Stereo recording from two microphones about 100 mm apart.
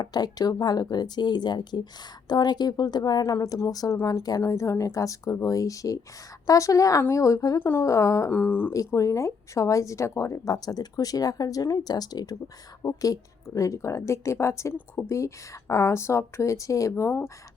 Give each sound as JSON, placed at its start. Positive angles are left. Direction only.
{"t": 0.0, "sound": "speech", "side_deg": 40}
{"t": 7.6, "sound": "speech", "side_deg": 20}
{"t": 7.9, "sound": "speech", "side_deg": 30}
{"t": 8.3, "sound": "speech", "side_deg": 20}
{"t": 8.7, "sound": "speech", "side_deg": 35}
{"t": 16.9, "sound": "speech", "side_deg": 20}